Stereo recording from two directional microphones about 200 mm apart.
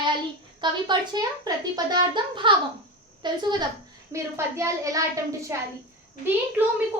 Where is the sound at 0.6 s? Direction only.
20° right (ahead or behind).